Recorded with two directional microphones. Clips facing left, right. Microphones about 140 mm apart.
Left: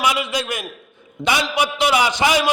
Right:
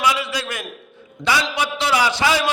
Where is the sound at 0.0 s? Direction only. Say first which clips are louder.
Left 1 dB; 20° left (ahead or behind).